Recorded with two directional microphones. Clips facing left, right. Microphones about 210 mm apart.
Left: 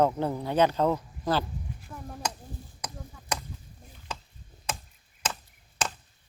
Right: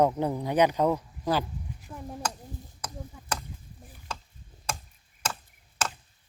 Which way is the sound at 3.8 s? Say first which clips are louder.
Even; centre (ahead or behind).